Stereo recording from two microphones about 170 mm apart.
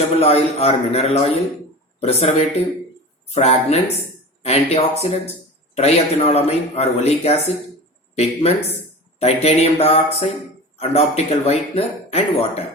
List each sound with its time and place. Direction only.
0.2 s speech: 35° left (ahead or behind)